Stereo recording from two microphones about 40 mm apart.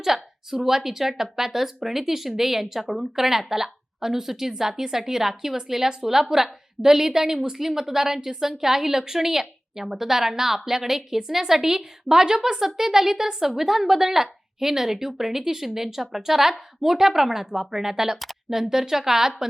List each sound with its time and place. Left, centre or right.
0.0 s a woman's voice: centre